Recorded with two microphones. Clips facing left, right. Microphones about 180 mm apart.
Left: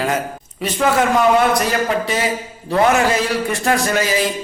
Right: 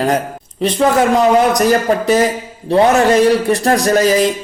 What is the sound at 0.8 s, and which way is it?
A man's voice, 40° right (ahead or behind).